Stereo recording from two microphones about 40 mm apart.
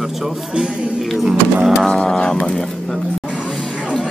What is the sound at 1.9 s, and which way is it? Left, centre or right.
Speech, centre.